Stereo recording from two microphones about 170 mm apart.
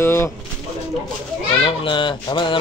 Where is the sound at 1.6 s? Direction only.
30° left (ahead or behind).